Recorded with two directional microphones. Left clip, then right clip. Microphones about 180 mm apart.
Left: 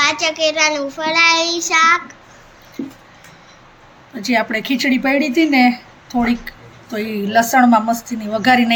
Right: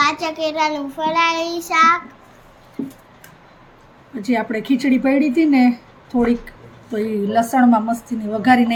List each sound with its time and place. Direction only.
0.0 s child singing: 35° right (ahead or behind)
4.2 s speech: centre (ahead or behind)